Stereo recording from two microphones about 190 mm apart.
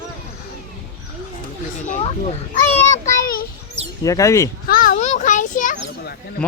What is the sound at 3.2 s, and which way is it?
Children playing, 50° left (ahead or behind).